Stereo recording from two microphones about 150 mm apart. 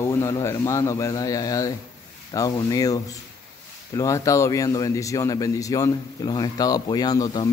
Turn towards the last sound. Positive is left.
turn(degrees=25)  # may be behind; listen again after turning